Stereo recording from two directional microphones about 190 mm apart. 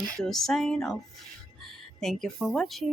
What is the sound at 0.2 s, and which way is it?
Speech, centre (ahead or behind).